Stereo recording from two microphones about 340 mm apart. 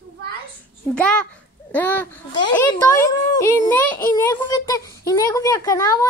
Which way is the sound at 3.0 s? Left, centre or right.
Centre.